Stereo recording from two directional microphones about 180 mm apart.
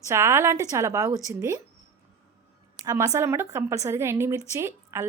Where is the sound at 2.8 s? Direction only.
20° right (ahead or behind).